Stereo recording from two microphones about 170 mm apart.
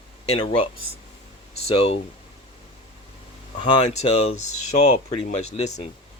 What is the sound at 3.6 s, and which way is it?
Speech, 40° left (ahead or behind).